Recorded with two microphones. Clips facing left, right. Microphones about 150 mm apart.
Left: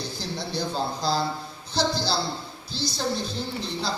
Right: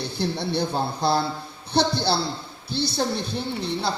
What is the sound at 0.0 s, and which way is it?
A man's voice, 60° right (ahead or behind).